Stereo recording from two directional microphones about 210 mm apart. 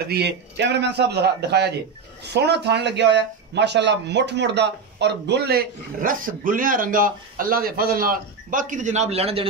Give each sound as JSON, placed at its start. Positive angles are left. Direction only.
{"t": 0.1, "sound": "speech", "side_deg": -55}